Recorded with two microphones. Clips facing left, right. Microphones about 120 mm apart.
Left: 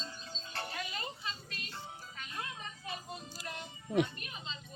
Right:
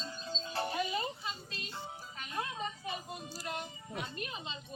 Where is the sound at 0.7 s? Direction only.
20° right (ahead or behind).